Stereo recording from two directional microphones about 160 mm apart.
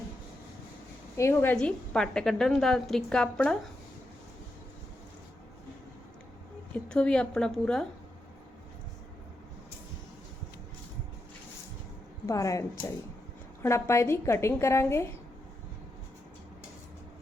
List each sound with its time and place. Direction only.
1.1 s a woman's voice: 15° left (ahead or behind)
6.8 s a woman's voice: 5° left (ahead or behind)
12.2 s a woman's voice: 20° left (ahead or behind)